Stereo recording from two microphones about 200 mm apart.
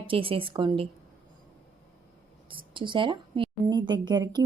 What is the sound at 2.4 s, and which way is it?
A woman's voice, 25° right (ahead or behind).